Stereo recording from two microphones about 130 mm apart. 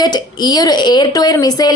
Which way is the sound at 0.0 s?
30° left (ahead or behind).